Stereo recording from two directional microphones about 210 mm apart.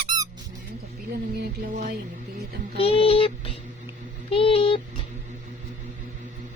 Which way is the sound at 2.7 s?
25° left (ahead or behind).